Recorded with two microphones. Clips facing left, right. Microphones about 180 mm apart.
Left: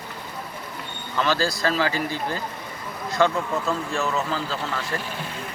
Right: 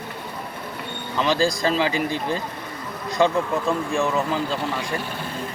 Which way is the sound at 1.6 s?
20° right (ahead or behind).